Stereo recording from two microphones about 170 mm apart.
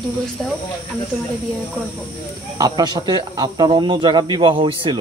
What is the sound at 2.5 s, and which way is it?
Speech, 20° right (ahead or behind).